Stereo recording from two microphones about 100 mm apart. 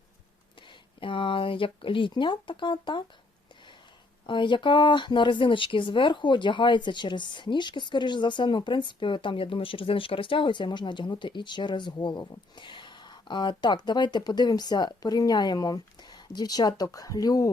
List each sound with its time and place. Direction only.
0.9 s speech: 60° left (ahead or behind)
4.3 s speech: 55° left (ahead or behind); by 17.5 s 35° left (ahead or behind)